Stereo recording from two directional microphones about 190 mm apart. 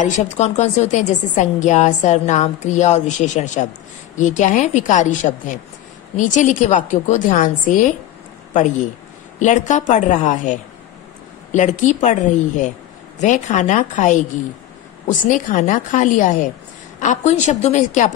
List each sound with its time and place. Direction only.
0.0 s a woman's voice: 40° left (ahead or behind)
9.4 s a woman's voice: 40° left (ahead or behind)